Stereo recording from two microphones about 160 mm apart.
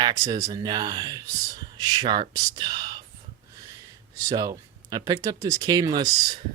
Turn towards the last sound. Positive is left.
turn(degrees=-25)  # may be behind; listen again after turning